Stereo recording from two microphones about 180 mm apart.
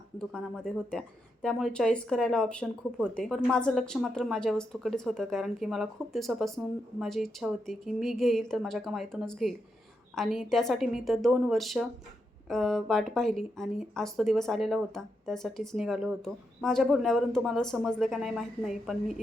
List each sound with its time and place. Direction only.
0.2 s speech: 5° left (ahead or behind)